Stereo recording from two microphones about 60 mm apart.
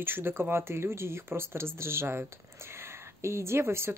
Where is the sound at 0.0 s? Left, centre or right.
Right.